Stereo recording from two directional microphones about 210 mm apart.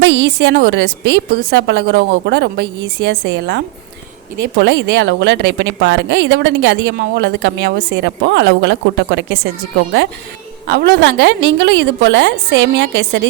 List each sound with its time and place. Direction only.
0.0 s a woman's voice: 55° right (ahead or behind)
10.7 s a woman's voice: 55° right (ahead or behind)